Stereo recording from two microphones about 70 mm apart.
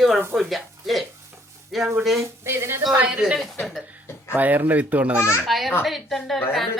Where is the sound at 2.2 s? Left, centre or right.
Right.